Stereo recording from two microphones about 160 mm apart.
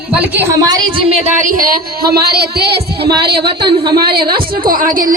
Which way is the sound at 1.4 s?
55° right (ahead or behind).